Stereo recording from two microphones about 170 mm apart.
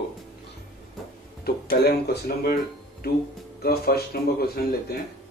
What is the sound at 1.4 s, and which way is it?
Speech, 70° left (ahead or behind).